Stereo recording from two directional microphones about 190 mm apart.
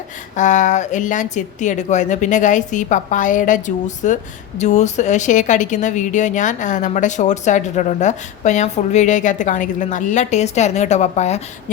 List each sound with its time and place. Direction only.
0.3 s speech: 40° left (ahead or behind)